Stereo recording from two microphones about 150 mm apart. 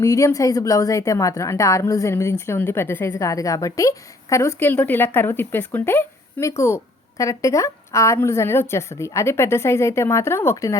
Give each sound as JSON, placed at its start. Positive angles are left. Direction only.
{"t": 0.0, "sound": "a woman's voice", "side_deg": 20}